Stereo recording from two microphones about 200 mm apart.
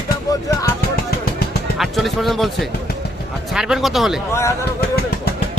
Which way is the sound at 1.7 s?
Centre (ahead or behind).